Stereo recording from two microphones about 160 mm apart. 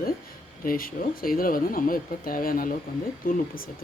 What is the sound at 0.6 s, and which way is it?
Speech, 65° left (ahead or behind).